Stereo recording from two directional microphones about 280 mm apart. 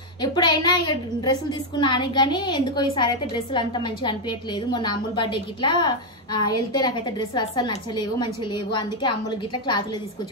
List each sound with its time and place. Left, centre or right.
0.2 s a woman's voice: centre